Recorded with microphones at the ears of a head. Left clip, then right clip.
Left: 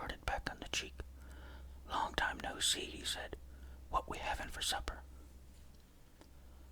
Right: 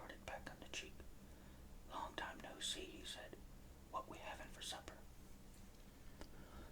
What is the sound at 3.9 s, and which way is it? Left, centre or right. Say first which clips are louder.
Speech: left 11 dB; left.